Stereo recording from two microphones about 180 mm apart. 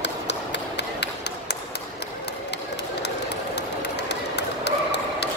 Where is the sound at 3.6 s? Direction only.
70° left (ahead or behind).